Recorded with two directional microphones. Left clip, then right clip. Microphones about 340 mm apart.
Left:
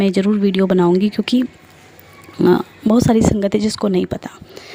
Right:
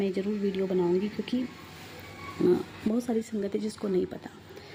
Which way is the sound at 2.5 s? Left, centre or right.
Left.